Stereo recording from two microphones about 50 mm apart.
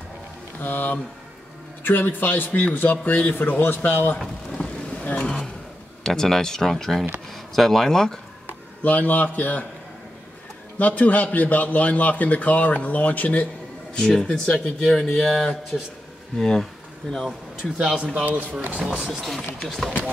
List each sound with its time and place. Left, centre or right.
0.6 s a man's voice: left
4.2 s vehicle: centre
6.0 s speech: centre
8.8 s a man's voice: left
10.8 s a man's voice: left
13.9 s speech: centre
17.6 s a man's voice: centre
18.1 s speech: right